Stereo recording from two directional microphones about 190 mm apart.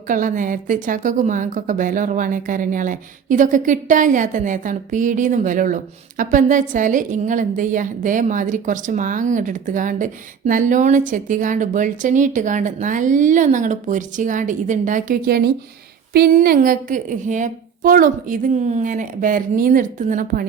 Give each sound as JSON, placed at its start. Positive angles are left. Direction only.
{"t": 0.1, "sound": "a woman's voice", "side_deg": -45}